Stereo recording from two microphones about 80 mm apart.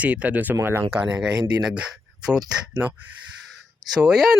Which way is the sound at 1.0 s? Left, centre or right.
Centre.